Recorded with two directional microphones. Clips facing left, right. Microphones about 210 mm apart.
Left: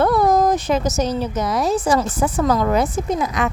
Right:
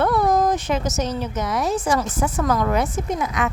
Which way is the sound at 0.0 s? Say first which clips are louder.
Left 3 dB; 40° left (ahead or behind).